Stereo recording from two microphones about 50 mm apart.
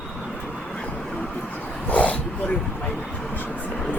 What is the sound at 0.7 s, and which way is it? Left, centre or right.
Vehicle, left.